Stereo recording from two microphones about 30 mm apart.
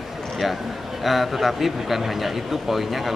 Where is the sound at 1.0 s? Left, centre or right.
Centre.